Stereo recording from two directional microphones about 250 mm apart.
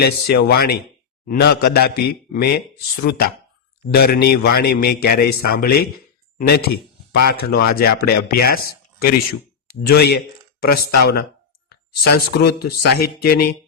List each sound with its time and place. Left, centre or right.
0.0 s a man's voice: left
7.1 s a man's voice: left